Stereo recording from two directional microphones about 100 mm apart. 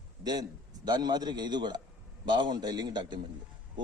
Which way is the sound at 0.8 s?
45° right (ahead or behind).